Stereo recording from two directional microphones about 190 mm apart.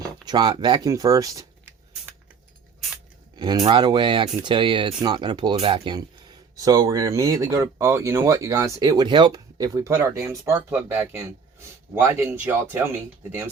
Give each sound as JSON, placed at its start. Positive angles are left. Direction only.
{"t": 0.3, "sound": "speech", "side_deg": -25}
{"t": 3.3, "sound": "speech", "side_deg": -20}